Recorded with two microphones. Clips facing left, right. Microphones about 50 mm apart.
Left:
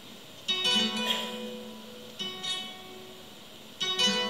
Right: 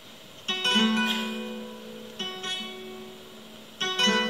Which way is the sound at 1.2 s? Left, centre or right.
Right.